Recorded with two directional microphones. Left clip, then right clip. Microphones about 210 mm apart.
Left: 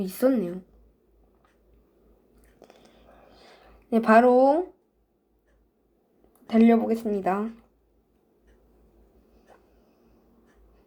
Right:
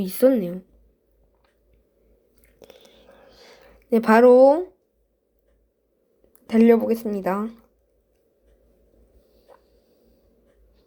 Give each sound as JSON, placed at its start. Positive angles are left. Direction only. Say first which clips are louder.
{"t": 0.0, "sound": "speech", "louder": "right 5 dB", "side_deg": -30}
{"t": 2.6, "sound": "whispering", "louder": "right 5 dB", "side_deg": -35}
{"t": 6.5, "sound": "speech", "louder": "right 4 dB", "side_deg": -30}